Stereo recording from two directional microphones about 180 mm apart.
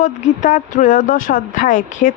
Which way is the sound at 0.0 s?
45° left (ahead or behind).